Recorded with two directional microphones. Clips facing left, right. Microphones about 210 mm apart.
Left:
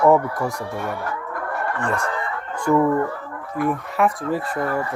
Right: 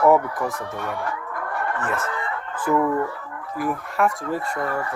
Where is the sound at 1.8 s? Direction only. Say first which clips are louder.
Left 4 dB; 5° right (ahead or behind).